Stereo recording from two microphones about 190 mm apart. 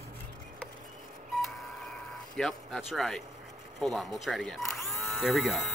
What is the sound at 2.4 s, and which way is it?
Speech, centre (ahead or behind).